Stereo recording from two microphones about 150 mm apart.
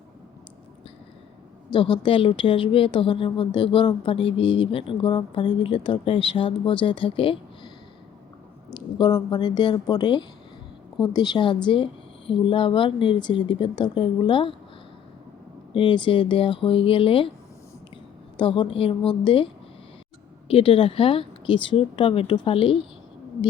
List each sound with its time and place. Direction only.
1.7 s a woman's voice: 35° left (ahead or behind)
8.7 s a woman's voice: 30° left (ahead or behind)
15.7 s a woman's voice: 35° left (ahead or behind)
18.3 s a woman's voice: 35° left (ahead or behind)
20.5 s a woman's voice: 40° left (ahead or behind)